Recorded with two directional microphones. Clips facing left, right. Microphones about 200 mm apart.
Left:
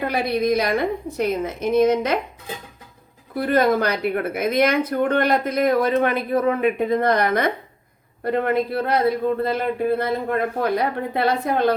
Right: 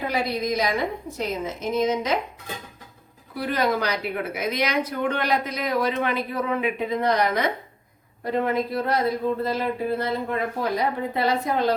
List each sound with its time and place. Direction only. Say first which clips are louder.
0.0 s a woman's voice: left 4 dB; 60° left (ahead or behind)
3.3 s a woman's voice: left 6 dB; 50° left (ahead or behind)